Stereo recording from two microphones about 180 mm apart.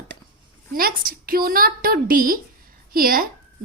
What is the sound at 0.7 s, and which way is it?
A woman's voice, 55° right (ahead or behind).